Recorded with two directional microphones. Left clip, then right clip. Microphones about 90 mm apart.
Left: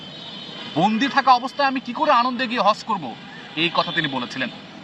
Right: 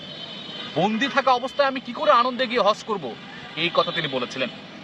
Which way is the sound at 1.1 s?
25° right (ahead or behind).